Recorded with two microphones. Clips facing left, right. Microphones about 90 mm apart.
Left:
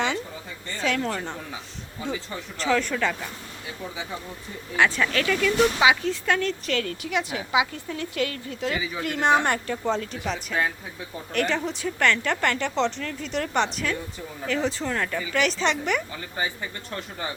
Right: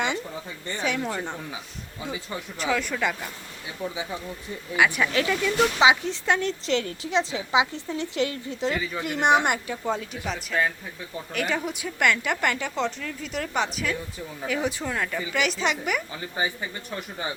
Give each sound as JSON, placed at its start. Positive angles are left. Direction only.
{"t": 0.7, "sound": "speech", "side_deg": -15}
{"t": 2.6, "sound": "speech", "side_deg": -5}
{"t": 4.8, "sound": "speech", "side_deg": -15}